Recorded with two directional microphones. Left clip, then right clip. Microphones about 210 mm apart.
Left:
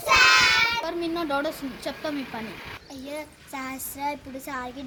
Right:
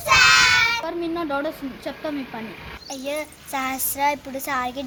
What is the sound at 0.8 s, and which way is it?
Speech, centre (ahead or behind).